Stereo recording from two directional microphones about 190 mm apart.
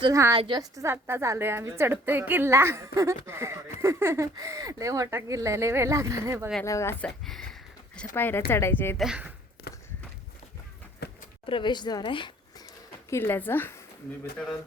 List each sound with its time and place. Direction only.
0.0 s a woman's voice: 15° right (ahead or behind)
6.7 s speech: 15° left (ahead or behind)
7.3 s speech: centre (ahead or behind)
9.0 s speech: 5° right (ahead or behind)
11.0 s a sound: 55° left (ahead or behind)
11.4 s speech: 25° left (ahead or behind)
13.1 s speech: 10° left (ahead or behind)